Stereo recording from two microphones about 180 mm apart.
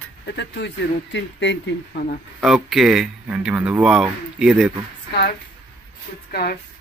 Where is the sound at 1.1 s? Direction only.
80° left.